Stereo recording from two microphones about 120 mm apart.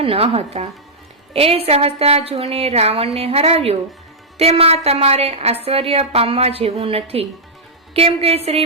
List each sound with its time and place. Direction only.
0.0 s a woman's voice: 55° right (ahead or behind)